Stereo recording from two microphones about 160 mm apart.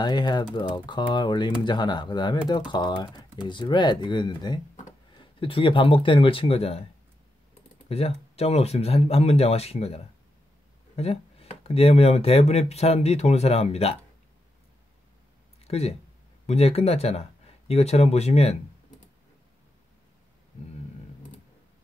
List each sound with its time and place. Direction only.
0.0 s speech: 25° left (ahead or behind)
7.9 s speech: 40° left (ahead or behind)
15.6 s speech: 40° left (ahead or behind)